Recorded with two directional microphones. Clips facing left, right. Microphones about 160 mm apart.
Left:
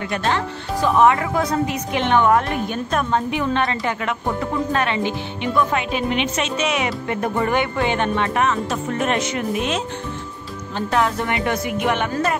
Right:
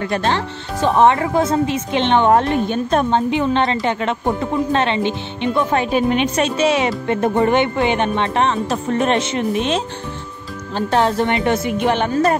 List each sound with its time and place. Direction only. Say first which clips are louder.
0.1 s speech: even; 30° right (ahead or behind)
10.9 s music: right 4 dB; 30° right (ahead or behind)